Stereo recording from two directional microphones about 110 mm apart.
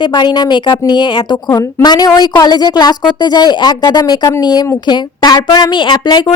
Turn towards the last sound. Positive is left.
turn(degrees=45)  # may be behind; listen again after turning